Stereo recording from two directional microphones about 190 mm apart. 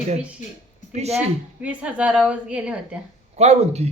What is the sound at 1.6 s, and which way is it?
Speech, 5° right (ahead or behind).